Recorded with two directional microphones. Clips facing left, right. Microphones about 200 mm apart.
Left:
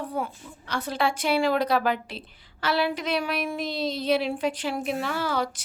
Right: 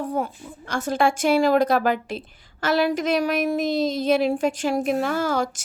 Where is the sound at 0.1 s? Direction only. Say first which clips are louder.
Right 5 dB; 45° right (ahead or behind).